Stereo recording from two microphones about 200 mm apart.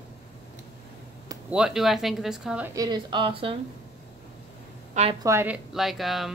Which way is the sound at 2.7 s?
20° right (ahead or behind).